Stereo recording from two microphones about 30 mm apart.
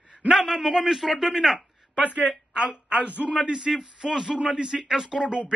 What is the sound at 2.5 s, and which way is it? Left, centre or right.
Speech, right.